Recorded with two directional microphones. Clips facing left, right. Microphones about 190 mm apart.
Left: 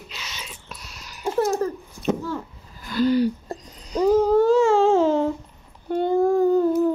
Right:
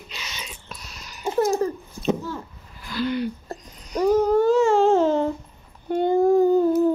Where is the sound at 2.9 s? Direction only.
40° left (ahead or behind).